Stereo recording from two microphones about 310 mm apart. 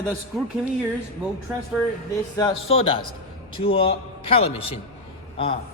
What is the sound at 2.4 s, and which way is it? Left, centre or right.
A man's voice, centre.